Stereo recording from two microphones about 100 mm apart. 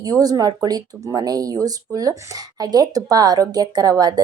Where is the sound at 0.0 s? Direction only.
40° right (ahead or behind).